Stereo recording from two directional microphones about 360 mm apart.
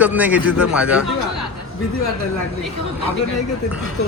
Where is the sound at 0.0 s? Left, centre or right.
Centre.